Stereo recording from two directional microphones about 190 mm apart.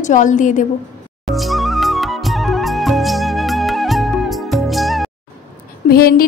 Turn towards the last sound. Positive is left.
turn(degrees=50)  # may be behind; listen again after turning